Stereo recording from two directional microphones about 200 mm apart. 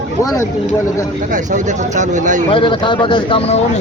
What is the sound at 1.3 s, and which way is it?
Speech, 40° right (ahead or behind).